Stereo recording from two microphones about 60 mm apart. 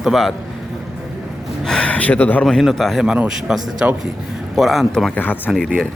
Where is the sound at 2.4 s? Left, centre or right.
Centre.